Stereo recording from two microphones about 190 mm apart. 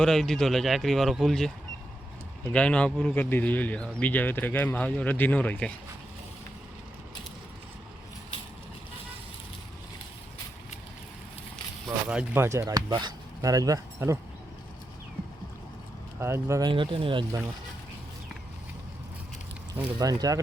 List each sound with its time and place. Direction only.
0.0 s speech: centre (ahead or behind)
12.0 s speech: 10° right (ahead or behind)
16.2 s speech: 15° right (ahead or behind)
19.7 s speech: 15° right (ahead or behind)